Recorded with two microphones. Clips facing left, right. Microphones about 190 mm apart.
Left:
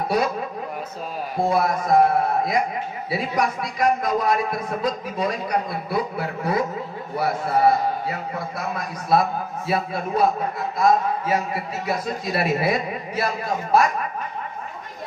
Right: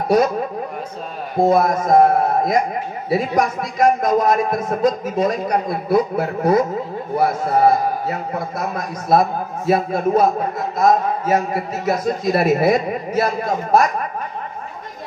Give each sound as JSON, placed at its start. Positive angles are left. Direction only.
{"t": 1.4, "sound": "a man's voice", "side_deg": -45}